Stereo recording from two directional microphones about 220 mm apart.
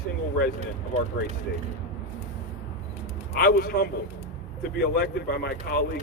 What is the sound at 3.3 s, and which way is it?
Speech, 45° left (ahead or behind).